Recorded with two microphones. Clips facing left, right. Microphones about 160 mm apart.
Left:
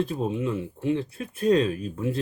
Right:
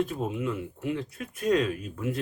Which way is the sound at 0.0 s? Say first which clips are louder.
Left 2 dB; 30° left (ahead or behind).